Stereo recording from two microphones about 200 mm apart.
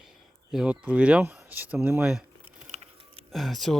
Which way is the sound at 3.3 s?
Centre (ahead or behind).